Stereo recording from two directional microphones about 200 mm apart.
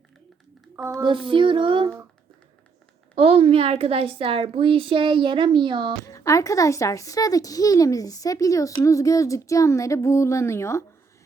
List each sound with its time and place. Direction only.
0.8 s speech: 15° right (ahead or behind)
1.0 s a woman's voice: 25° right (ahead or behind)
3.2 s a woman's voice: 30° right (ahead or behind)
6.1 s speech: 15° left (ahead or behind)